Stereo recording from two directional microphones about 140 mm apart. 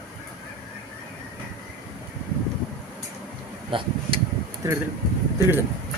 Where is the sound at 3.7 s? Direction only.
35° right (ahead or behind).